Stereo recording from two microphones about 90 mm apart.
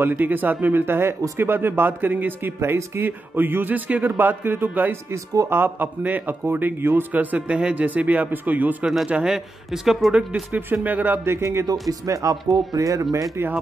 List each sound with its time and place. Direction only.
0.0 s speech: 20° right (ahead or behind)
5.1 s speech: 35° right (ahead or behind)
5.6 s a man's voice: 20° right (ahead or behind); by 10.4 s 5° right (ahead or behind)
10.5 s speech: 20° right (ahead or behind)
11.3 s speech: 30° right (ahead or behind)
13.4 s speech: 25° right (ahead or behind)